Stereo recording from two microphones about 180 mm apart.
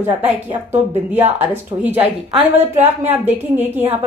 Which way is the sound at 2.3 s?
35° right (ahead or behind).